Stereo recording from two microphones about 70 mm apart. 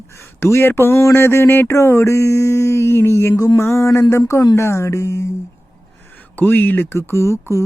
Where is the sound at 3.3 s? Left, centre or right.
Left.